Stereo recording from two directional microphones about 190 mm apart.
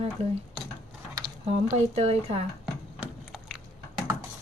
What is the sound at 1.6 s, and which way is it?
Speech, 35° right (ahead or behind).